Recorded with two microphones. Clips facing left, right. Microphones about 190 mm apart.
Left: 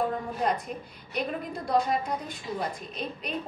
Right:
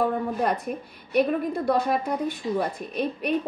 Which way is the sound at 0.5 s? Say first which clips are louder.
Right 3 dB; 60° right (ahead or behind).